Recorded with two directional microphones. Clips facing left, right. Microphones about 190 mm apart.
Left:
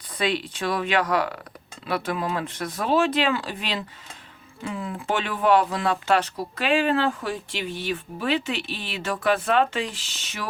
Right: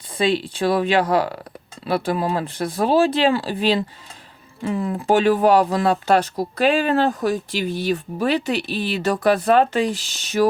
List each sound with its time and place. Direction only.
0.2 s speech: 30° right (ahead or behind)